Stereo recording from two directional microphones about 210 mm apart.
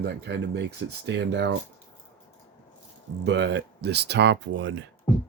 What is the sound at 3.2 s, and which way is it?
Speech, 55° right (ahead or behind).